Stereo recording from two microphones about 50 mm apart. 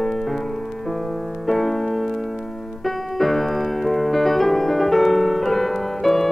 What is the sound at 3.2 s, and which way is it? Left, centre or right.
Music, centre.